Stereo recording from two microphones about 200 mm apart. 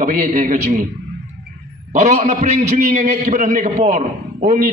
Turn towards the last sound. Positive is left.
turn(degrees=-35)  # may be behind; listen again after turning